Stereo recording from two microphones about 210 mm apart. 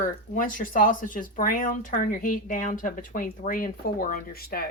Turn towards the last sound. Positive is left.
turn(degrees=45)  # may be behind; listen again after turning